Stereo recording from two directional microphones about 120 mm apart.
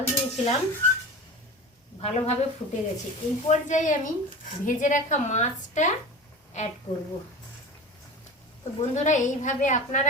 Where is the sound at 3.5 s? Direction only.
90° left.